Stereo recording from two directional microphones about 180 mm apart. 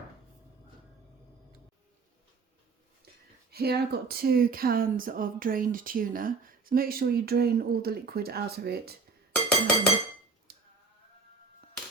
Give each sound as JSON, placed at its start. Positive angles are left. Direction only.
{"t": 3.5, "sound": "speech", "side_deg": -60}
{"t": 9.3, "sound": "chink", "side_deg": 5}
{"t": 10.5, "sound": "a sound", "side_deg": -60}